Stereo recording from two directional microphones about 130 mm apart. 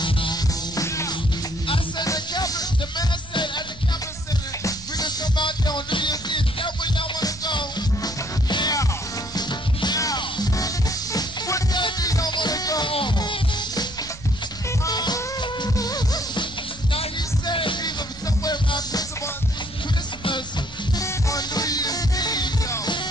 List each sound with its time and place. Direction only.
0.0 s music: 35° left (ahead or behind)
0.8 s music: 20° left (ahead or behind)
4.6 s music: 30° left (ahead or behind)
12.9 s music: 40° left (ahead or behind)
14.9 s music: 30° left (ahead or behind)
16.9 s music: 45° left (ahead or behind)
21.0 s music: 30° left (ahead or behind)